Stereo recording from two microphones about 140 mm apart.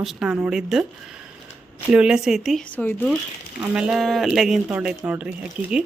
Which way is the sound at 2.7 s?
15° left (ahead or behind).